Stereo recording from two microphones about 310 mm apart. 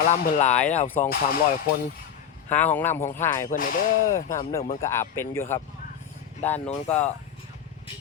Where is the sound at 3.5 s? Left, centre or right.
Left.